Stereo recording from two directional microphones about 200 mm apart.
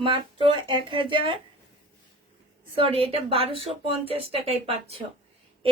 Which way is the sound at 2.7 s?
30° right (ahead or behind).